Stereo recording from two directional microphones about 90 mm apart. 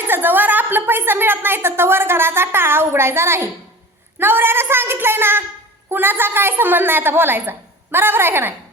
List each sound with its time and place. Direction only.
0.1 s a woman's voice: 20° right (ahead or behind)